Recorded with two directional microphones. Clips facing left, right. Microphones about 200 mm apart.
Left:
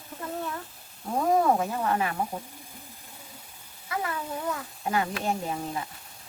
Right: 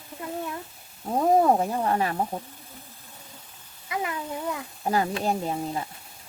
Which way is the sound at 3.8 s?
15° right (ahead or behind).